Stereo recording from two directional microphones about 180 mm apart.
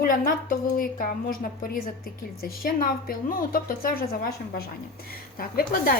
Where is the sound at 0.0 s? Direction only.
50° left (ahead or behind).